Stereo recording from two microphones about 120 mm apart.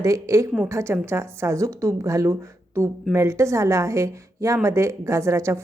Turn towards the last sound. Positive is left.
turn(degrees=-25)  # may be behind; listen again after turning